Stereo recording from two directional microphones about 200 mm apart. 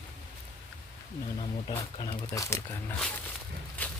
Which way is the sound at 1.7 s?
30° left (ahead or behind).